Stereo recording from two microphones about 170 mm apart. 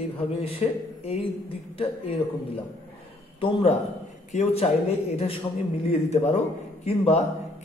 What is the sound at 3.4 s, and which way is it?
A man's voice, 35° left (ahead or behind).